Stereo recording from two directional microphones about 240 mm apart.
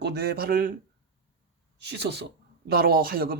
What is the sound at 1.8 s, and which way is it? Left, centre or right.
A man's voice, right.